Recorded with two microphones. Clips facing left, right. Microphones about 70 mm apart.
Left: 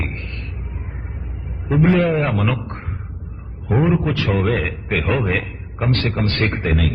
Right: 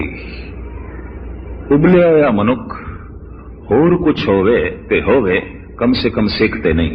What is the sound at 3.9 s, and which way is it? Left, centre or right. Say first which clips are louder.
A man's voice: right 8 dB; right.